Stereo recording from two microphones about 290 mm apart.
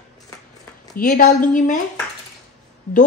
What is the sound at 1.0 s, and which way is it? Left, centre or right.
Speech, left.